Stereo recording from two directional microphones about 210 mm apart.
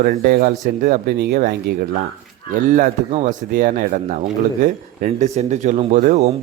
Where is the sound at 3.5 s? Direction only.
45° right (ahead or behind).